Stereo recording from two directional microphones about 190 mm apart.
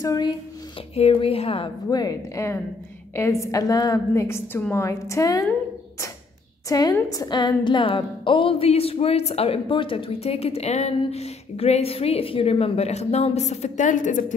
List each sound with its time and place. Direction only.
0.0 s a woman's voice: 20° left (ahead or behind)
0.9 s a woman's voice: 30° left (ahead or behind)
6.7 s a woman's voice: 20° left (ahead or behind); by 14.2 s 40° left (ahead or behind)